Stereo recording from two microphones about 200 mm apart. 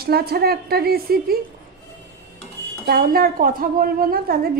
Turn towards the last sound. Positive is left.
turn(degrees=-45)  # may be behind; listen again after turning